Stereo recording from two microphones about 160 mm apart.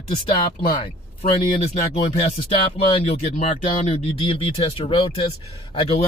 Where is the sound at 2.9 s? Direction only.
40° left (ahead or behind).